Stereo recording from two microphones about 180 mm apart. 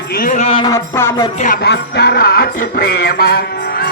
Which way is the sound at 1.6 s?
70° left (ahead or behind).